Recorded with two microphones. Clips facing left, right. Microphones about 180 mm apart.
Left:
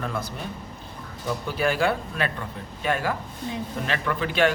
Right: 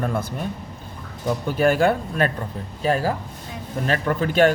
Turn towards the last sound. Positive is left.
turn(degrees=-45)  # may be behind; listen again after turning